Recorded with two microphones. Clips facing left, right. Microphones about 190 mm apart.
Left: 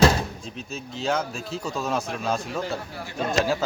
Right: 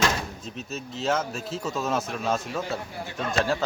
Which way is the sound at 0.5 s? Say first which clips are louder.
Right 1 dB; centre (ahead or behind).